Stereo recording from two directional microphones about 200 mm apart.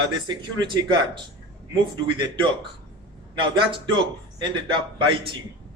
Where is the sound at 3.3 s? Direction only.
25° right (ahead or behind).